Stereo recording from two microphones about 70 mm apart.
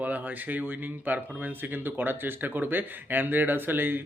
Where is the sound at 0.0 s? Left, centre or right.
Right.